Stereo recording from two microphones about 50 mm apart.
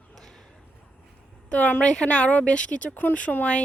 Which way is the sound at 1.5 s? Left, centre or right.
Left.